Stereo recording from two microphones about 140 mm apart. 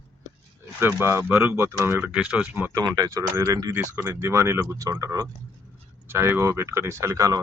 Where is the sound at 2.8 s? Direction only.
25° right (ahead or behind).